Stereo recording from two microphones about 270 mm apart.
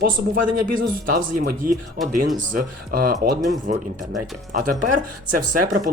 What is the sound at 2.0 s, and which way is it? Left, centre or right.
Speech, centre.